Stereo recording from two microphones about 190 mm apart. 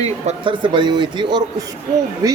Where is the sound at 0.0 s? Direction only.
30° right (ahead or behind).